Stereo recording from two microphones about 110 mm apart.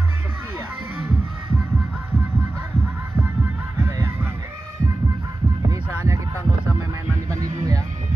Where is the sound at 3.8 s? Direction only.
20° right (ahead or behind).